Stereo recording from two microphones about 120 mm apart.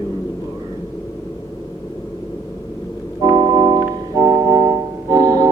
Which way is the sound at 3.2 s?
40° right (ahead or behind).